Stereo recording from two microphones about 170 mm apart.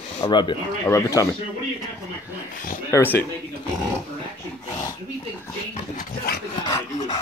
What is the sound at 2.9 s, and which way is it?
Speech, 10° left (ahead or behind).